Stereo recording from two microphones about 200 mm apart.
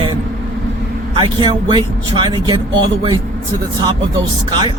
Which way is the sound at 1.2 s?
25° right (ahead or behind).